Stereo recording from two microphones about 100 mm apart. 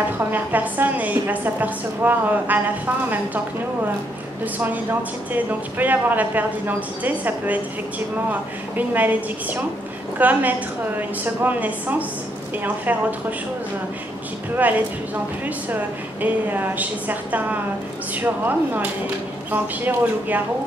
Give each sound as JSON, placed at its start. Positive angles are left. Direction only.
{"t": 0.2, "sound": "a woman's voice", "side_deg": -20}
{"t": 5.3, "sound": "a woman's voice", "side_deg": -15}
{"t": 14.5, "sound": "a woman's voice", "side_deg": -15}